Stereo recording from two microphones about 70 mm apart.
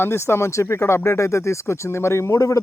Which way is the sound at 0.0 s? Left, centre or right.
Left.